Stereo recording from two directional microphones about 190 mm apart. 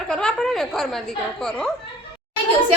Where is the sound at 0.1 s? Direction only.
5° left (ahead or behind).